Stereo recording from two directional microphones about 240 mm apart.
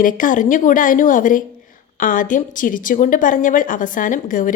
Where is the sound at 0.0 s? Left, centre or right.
Left.